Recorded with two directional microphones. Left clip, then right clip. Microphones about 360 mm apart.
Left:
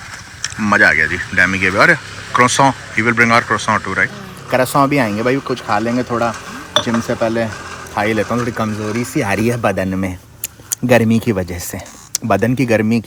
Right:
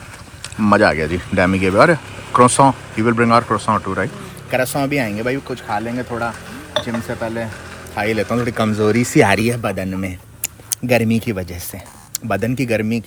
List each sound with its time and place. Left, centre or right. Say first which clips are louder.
0.6 s speech: left 3 dB; centre
4.5 s speech: left 5 dB; centre